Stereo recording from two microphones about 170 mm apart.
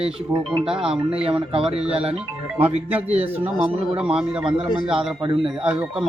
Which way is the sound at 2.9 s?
10° right (ahead or behind).